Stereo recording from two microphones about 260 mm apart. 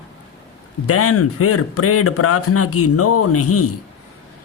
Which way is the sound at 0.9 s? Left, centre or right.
Left.